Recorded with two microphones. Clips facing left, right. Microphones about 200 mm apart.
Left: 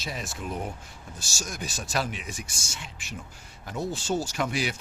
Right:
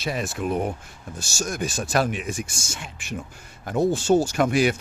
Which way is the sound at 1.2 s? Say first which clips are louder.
Right 9 dB; 55° right (ahead or behind).